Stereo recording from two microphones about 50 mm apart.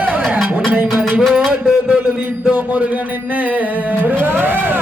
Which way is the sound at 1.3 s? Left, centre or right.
Centre.